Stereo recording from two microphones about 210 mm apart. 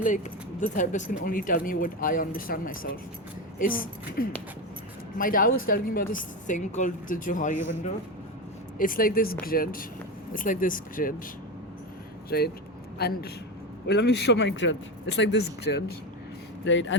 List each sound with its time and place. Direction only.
0.6 s speech: 35° left (ahead or behind)
8.8 s speech: 40° left (ahead or behind)
12.3 s a man's voice: 50° left (ahead or behind)
16.6 s a man's voice: 60° left (ahead or behind)